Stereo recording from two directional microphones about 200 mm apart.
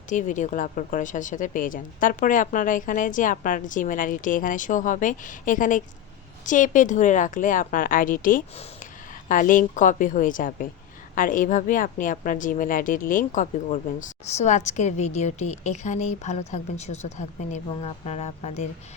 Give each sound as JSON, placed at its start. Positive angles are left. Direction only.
{"t": 0.1, "sound": "a woman's voice", "side_deg": 40}